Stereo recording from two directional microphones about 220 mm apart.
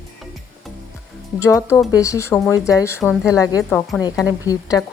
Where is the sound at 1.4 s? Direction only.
15° left (ahead or behind).